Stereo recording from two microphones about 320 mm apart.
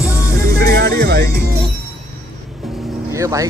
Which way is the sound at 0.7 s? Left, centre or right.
Right.